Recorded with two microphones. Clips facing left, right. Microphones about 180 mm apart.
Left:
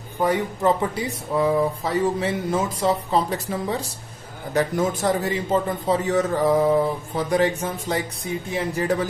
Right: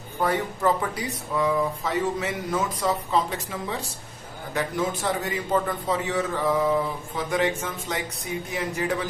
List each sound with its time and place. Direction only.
0.2 s speech: 15° left (ahead or behind); by 5.3 s 40° left (ahead or behind)
5.3 s a man's voice: 25° left (ahead or behind)
6.1 s speech: 40° left (ahead or behind)